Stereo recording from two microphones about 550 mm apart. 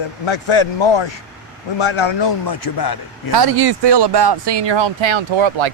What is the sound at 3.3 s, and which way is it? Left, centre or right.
Speech, right.